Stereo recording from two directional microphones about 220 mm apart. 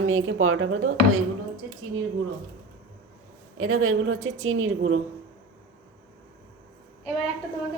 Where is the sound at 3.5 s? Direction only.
75° right (ahead or behind).